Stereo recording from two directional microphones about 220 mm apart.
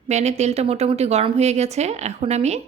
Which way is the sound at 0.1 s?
30° right (ahead or behind).